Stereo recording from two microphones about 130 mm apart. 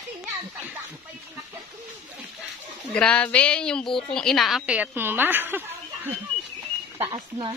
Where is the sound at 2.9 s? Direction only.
10° left (ahead or behind); by 5.6 s 15° right (ahead or behind).